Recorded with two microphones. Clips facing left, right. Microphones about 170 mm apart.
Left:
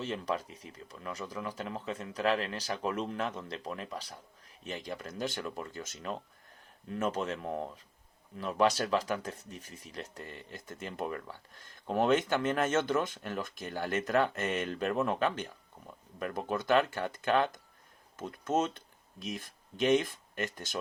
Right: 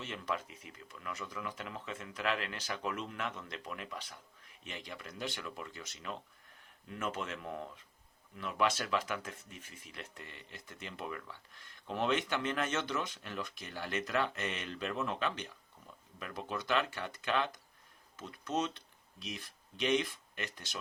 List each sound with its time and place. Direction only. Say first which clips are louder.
0.0 s speech: left 5 dB; 35° left (ahead or behind)